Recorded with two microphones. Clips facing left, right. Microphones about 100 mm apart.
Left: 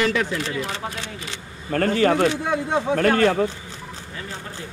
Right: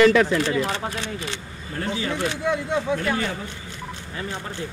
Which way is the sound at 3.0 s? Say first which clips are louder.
Left 8 dB; 65° left (ahead or behind).